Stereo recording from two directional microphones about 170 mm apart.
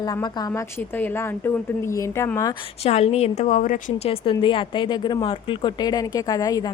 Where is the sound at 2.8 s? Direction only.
40° left (ahead or behind).